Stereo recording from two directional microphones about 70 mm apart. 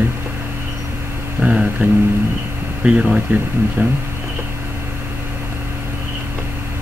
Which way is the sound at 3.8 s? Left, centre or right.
Right.